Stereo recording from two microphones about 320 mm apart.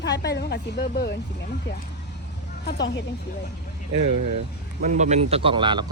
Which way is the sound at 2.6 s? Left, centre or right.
Left.